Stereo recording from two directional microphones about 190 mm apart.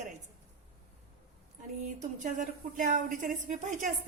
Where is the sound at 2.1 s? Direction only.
40° right (ahead or behind).